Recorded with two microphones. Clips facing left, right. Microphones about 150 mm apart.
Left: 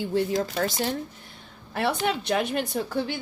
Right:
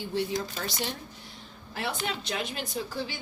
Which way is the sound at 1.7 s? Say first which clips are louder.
Left 7 dB; 60° left (ahead or behind).